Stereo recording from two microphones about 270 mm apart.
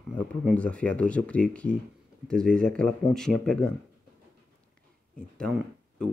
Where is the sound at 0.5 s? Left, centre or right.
Centre.